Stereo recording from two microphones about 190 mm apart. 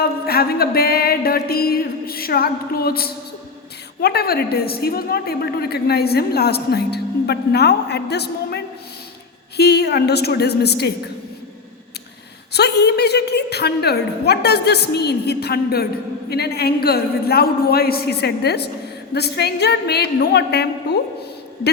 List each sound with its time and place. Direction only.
0.3 s mantra: 55° left (ahead or behind)
4.0 s a woman's voice: 55° left (ahead or behind)
12.5 s a woman's voice: 60° left (ahead or behind)